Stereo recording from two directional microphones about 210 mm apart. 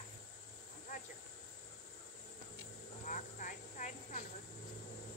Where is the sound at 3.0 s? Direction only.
35° left (ahead or behind).